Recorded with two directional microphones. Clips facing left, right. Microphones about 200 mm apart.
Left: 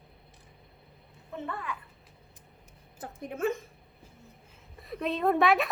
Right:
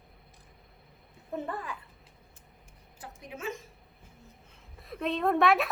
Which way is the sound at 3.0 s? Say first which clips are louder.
Left 7 dB; 50° left (ahead or behind).